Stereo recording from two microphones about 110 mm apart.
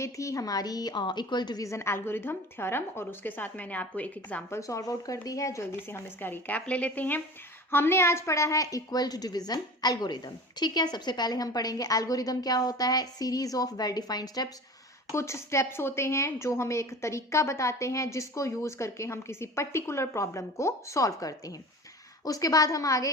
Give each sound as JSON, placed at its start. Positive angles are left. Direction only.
{"t": 0.0, "sound": "a woman's voice", "side_deg": 30}
{"t": 1.6, "sound": "speech", "side_deg": 25}
{"t": 4.5, "sound": "a woman's voice", "side_deg": 30}
{"t": 15.1, "sound": "a woman's voice", "side_deg": 25}